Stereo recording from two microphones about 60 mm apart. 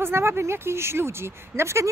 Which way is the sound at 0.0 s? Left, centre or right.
Right.